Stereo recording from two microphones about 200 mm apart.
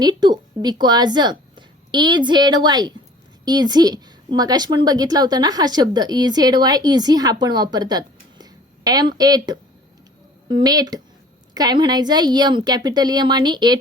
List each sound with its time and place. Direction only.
0.0 s a woman's voice: 20° right (ahead or behind)